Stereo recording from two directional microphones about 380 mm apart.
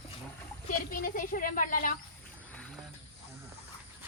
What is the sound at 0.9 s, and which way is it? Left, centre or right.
Speech, left.